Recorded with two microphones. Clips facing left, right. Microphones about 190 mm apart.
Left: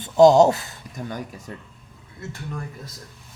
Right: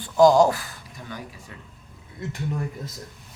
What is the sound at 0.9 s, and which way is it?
Speech, 45° left (ahead or behind).